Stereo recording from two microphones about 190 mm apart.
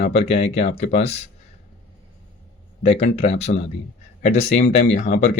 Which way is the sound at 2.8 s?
35° left (ahead or behind).